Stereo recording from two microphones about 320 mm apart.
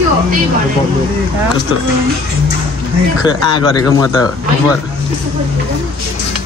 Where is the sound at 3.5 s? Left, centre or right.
Centre.